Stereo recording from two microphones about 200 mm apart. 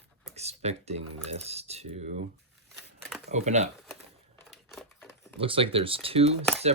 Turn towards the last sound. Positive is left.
turn(degrees=-30)  # may be behind; listen again after turning